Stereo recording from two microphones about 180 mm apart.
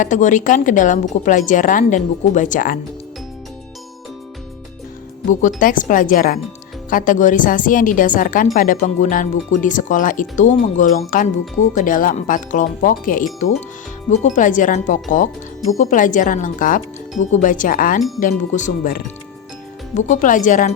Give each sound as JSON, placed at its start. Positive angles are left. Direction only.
{"t": 0.0, "sound": "a woman's voice", "side_deg": 45}
{"t": 5.3, "sound": "a woman's voice", "side_deg": 45}